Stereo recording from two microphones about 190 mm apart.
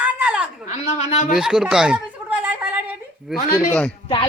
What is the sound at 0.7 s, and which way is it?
Speech, 35° left (ahead or behind).